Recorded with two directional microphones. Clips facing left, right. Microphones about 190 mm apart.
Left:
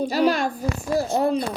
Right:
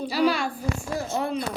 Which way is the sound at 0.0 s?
45° left (ahead or behind).